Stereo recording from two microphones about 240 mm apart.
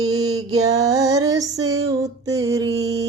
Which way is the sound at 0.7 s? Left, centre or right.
Centre.